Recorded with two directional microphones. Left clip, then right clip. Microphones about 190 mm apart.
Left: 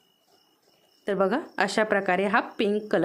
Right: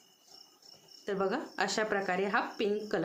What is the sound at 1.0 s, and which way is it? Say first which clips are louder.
Speech: left 8 dB; 45° left (ahead or behind).